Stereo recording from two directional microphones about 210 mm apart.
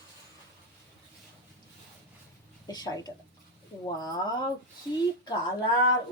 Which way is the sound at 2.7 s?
20° left (ahead or behind).